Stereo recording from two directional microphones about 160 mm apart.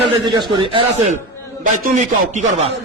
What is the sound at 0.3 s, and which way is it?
Speech, 30° right (ahead or behind).